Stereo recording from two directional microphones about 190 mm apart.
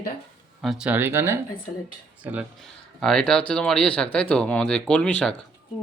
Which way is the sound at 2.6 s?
Centre (ahead or behind).